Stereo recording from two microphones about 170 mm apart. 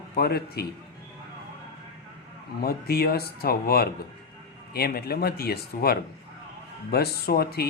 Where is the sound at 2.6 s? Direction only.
65° left (ahead or behind).